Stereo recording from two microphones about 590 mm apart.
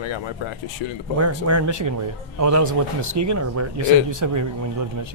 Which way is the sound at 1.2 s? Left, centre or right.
Right.